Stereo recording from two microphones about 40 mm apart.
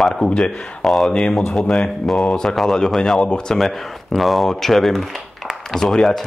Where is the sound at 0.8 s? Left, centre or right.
Centre.